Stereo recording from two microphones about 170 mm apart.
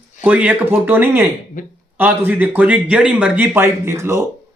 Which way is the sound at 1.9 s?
10° right (ahead or behind).